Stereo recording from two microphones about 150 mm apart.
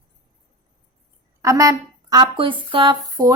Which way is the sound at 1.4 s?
20° right (ahead or behind).